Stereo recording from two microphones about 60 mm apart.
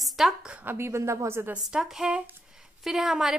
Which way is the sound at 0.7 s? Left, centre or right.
Right.